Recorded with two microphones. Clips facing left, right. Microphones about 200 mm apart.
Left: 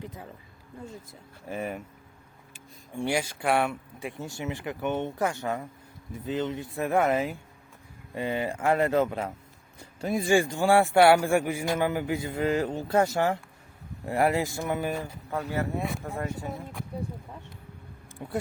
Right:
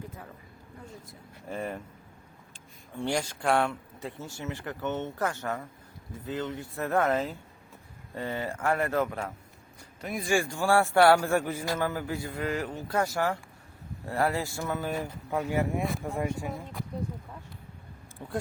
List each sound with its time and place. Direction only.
1.5 s a man's voice: 5° left (ahead or behind)
14.9 s speech: 15° right (ahead or behind)
15.8 s speech: centre (ahead or behind)
16.1 s speech: 10° right (ahead or behind)
18.2 s speech: 15° left (ahead or behind)